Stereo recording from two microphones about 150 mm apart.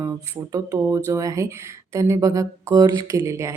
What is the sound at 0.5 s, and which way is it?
Speech, 20° right (ahead or behind).